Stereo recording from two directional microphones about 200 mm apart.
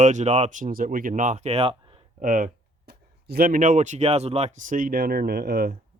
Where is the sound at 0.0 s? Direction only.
35° right (ahead or behind).